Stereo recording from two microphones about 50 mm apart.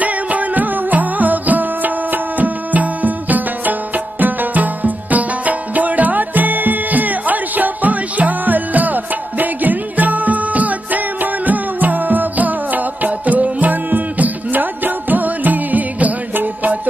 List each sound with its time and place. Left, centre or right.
0.0 s music: right